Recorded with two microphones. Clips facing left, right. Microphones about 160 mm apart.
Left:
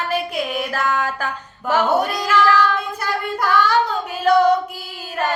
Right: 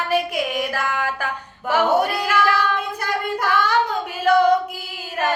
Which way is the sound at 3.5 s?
10° right (ahead or behind).